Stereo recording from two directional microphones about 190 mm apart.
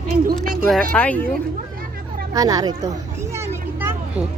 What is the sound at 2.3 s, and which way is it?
Vehicle, 20° right (ahead or behind).